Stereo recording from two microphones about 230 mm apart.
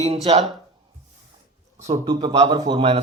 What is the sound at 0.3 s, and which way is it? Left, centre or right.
Speech, right.